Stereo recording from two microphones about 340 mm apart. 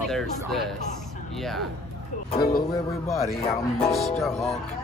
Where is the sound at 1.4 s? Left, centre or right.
Centre.